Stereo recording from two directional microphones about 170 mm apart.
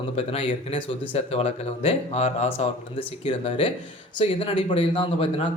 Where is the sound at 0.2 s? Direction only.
35° left (ahead or behind).